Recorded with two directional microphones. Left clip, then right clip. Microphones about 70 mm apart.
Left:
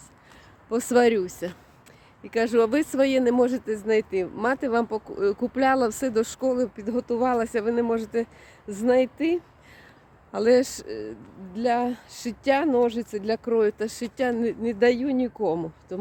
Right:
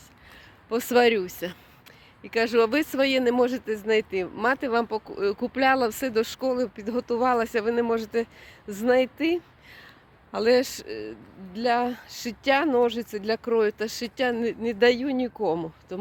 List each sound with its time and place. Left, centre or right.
0.7 s speech: left
5.8 s speech: left
10.3 s speech: left
11.5 s speech: left
15.9 s speech: left